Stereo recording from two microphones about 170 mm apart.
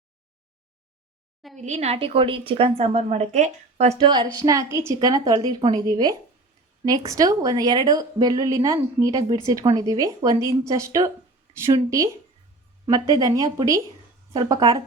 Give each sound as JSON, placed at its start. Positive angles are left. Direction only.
{"t": 1.5, "sound": "a woman's voice", "side_deg": -45}
{"t": 4.0, "sound": "a woman's voice", "side_deg": -25}